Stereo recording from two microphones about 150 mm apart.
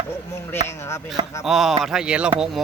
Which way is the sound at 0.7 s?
20° left (ahead or behind).